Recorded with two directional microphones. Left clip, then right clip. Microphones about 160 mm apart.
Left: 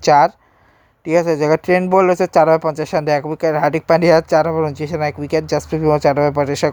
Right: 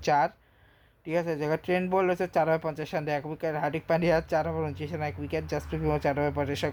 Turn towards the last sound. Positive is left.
turn(degrees=45)  # may be behind; listen again after turning